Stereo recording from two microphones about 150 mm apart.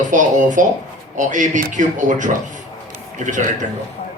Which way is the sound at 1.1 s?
55° right (ahead or behind).